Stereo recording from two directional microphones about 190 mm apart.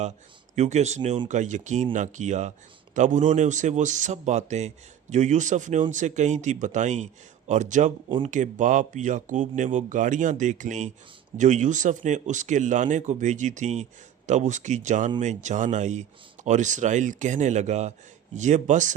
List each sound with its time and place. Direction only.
0.5 s a man's voice: 35° right (ahead or behind)